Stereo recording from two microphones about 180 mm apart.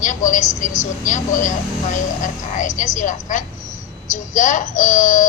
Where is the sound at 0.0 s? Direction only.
45° left (ahead or behind).